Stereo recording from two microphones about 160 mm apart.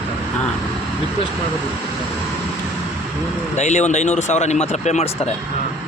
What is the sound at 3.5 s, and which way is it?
Speech, 45° left (ahead or behind).